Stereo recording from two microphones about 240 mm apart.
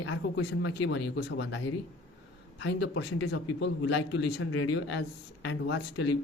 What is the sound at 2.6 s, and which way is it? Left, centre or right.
A man's voice, left.